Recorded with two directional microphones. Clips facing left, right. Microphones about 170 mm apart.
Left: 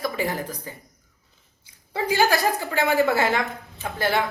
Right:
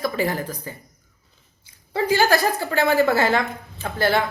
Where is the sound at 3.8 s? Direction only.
35° right (ahead or behind).